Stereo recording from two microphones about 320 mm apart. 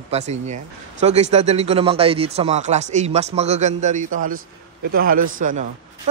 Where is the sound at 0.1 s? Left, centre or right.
Right.